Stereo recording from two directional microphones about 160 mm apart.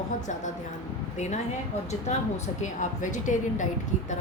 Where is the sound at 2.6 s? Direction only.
50° left (ahead or behind).